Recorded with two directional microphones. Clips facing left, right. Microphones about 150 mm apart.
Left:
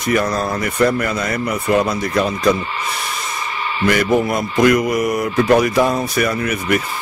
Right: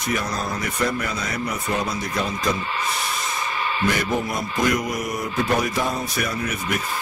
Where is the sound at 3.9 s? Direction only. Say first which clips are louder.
Left 8 dB; 65° left (ahead or behind).